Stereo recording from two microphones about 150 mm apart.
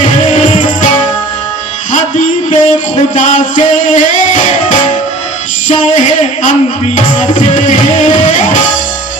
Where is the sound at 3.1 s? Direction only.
55° left (ahead or behind).